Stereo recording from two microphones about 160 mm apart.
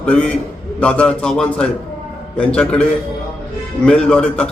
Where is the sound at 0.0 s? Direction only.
5° left (ahead or behind).